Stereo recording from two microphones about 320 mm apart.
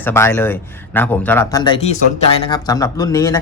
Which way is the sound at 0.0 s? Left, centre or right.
Centre.